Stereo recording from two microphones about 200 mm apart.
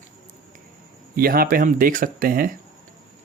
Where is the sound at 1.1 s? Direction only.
50° right (ahead or behind).